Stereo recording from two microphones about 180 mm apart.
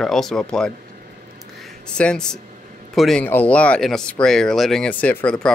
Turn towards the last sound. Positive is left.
turn(degrees=5)  # may be behind; listen again after turning